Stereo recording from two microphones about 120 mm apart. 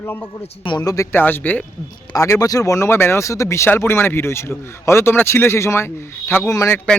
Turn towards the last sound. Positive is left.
turn(degrees=25)  # may be behind; listen again after turning